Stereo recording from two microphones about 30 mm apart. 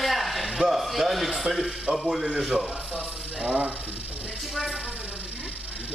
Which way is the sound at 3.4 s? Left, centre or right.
Right.